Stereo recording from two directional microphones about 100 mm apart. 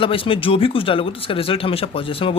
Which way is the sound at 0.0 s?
65° left (ahead or behind).